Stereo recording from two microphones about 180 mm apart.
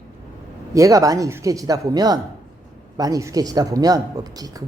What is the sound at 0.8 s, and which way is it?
Speech, 20° right (ahead or behind).